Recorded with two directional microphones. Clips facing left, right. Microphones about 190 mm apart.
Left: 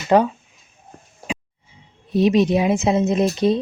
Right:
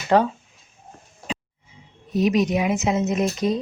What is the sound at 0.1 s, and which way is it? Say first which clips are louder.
Speech: left 3 dB; 20° left (ahead or behind).